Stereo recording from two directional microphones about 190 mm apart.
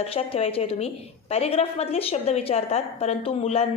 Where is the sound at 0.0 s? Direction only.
30° left (ahead or behind).